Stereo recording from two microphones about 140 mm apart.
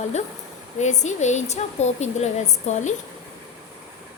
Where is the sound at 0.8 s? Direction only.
55° left (ahead or behind).